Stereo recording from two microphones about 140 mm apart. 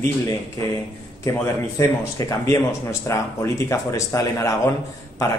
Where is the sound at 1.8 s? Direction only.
25° left (ahead or behind).